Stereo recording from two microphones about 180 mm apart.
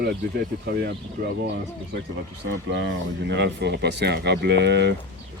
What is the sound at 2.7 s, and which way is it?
Speech, 75° right (ahead or behind).